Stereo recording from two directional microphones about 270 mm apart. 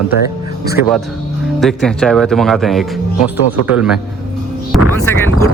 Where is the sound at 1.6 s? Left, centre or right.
Centre.